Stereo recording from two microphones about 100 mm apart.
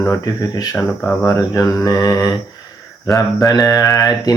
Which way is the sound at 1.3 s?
30° left (ahead or behind).